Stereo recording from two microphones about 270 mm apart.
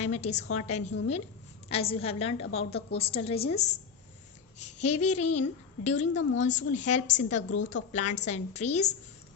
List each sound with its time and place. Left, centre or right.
0.0 s a woman's voice: left